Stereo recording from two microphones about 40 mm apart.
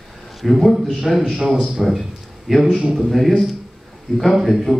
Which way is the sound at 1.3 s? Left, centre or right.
Centre.